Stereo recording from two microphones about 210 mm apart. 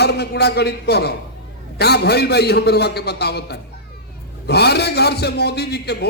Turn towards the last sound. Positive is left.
turn(degrees=50)  # may be behind; listen again after turning